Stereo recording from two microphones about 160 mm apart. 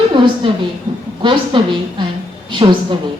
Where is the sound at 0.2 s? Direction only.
30° right (ahead or behind).